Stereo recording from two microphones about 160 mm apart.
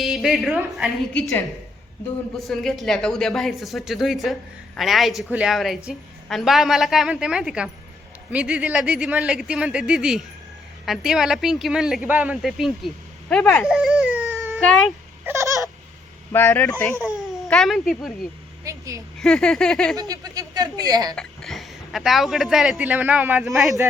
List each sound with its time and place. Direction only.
0.0 s speech: centre (ahead or behind)
2.4 s speech: centre (ahead or behind)
13.7 s a sound: 5° right (ahead or behind)
14.6 s speech: centre (ahead or behind)
15.2 s a sound: 15° right (ahead or behind)
16.3 s speech: 15° left (ahead or behind)
16.9 s speech: 10° right (ahead or behind)
17.4 s speech: centre (ahead or behind)
18.6 s a sound: 20° right (ahead or behind)
19.2 s speech: 5° left (ahead or behind)
20.0 s speech: 25° right (ahead or behind)
21.2 s speech: centre (ahead or behind)